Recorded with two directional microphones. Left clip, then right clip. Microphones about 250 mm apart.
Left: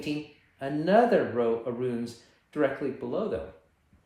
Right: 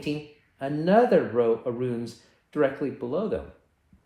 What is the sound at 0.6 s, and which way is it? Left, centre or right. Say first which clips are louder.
Speech: right 2 dB; right.